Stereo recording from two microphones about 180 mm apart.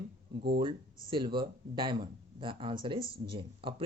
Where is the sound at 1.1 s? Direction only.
25° right (ahead or behind).